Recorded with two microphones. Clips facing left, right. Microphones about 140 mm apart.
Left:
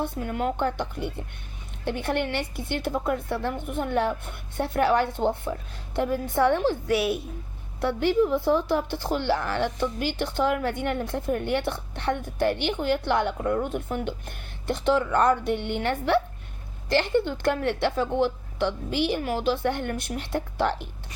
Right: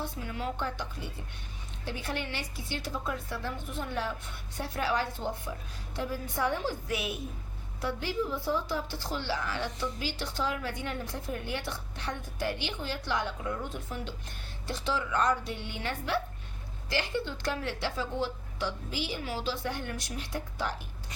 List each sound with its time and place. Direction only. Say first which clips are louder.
0.0 s speech: left 8 dB; 55° left (ahead or behind)